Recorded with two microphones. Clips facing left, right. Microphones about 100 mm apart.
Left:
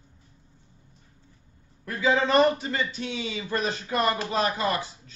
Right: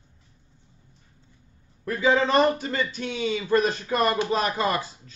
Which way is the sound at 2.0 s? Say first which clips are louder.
Right 1 dB; 30° right (ahead or behind).